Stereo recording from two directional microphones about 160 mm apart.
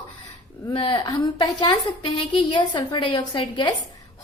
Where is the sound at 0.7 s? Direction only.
30° left (ahead or behind).